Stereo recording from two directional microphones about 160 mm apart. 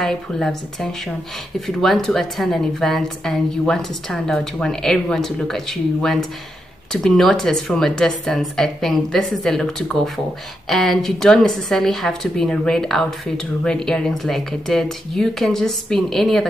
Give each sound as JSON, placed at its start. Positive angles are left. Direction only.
{"t": 0.0, "sound": "a woman's voice", "side_deg": 0}